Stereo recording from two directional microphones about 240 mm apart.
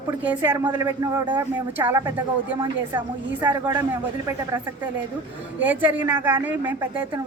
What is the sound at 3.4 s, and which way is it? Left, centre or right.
A man's voice, centre.